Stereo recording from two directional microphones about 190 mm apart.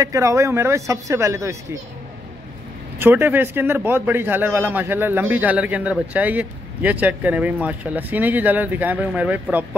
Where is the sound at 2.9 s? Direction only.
10° right (ahead or behind).